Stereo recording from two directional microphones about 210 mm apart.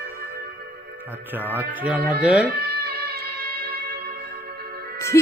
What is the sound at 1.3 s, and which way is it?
Speech, 10° right (ahead or behind).